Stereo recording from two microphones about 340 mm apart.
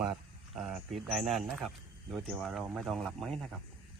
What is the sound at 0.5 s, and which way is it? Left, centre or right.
Speech, centre.